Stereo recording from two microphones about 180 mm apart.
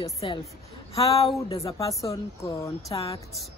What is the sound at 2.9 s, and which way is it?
Speech, 30° left (ahead or behind).